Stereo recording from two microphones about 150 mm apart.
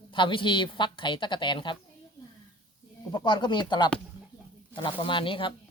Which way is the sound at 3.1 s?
30° left (ahead or behind).